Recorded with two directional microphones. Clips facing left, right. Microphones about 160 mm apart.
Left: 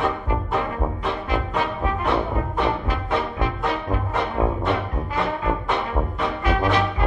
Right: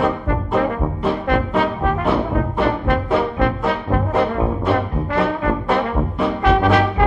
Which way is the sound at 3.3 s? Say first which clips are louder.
Right 5 dB; 65° right (ahead or behind).